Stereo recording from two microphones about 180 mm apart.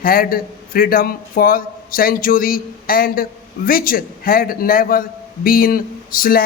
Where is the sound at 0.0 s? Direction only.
55° left (ahead or behind).